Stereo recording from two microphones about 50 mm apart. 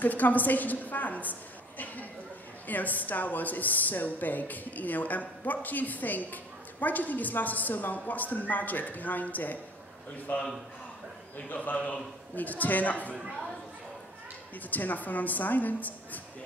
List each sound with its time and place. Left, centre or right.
0.0 s a woman's voice: left
2.7 s a woman's voice: left
14.7 s a woman's voice: left